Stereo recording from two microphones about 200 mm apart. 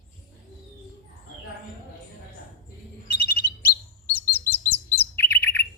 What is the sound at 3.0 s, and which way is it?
Bird, 50° left (ahead or behind).